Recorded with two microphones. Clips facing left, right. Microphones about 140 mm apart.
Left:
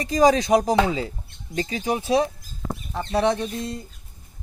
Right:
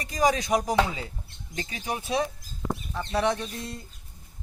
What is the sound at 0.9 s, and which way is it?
Speech, 25° left (ahead or behind).